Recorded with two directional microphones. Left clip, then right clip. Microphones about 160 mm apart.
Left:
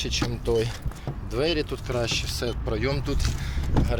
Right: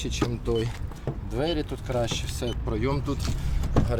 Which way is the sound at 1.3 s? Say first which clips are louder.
Left 3 dB; 15° right (ahead or behind).